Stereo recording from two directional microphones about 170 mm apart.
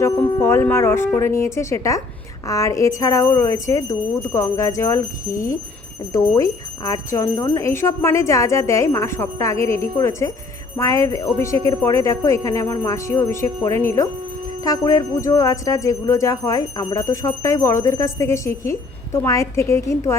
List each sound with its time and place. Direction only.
0.3 s jingle bell: 15° left (ahead or behind)